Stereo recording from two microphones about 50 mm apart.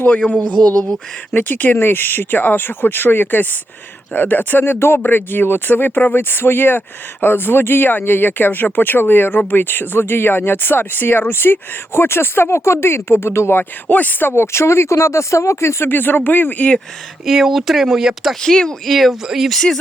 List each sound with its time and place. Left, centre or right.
0.2 s a man's voice: left
13.8 s speech: left
14.3 s speech: left
15.9 s speech: left
17.2 s speech: centre
18.4 s speech: centre
18.9 s speech: centre
19.5 s speech: centre